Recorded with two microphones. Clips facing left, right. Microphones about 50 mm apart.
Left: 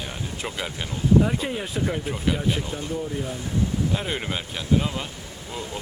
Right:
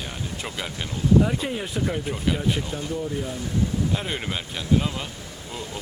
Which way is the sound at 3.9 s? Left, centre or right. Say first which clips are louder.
Left 1 dB; centre.